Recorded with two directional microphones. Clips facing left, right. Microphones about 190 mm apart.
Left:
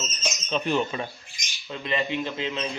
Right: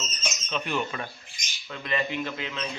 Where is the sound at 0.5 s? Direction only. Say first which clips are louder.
Left 5 dB; 30° left (ahead or behind).